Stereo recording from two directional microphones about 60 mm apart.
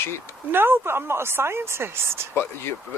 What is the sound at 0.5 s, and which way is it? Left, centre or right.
Speech, right.